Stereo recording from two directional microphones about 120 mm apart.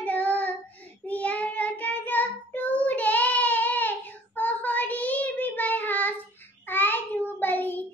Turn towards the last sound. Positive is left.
turn(degrees=15)  # may be behind; listen again after turning